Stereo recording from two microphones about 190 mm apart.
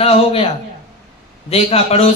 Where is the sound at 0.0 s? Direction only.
30° left (ahead or behind).